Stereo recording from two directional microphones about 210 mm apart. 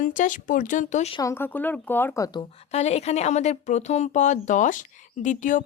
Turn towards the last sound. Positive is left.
turn(degrees=35)  # may be behind; listen again after turning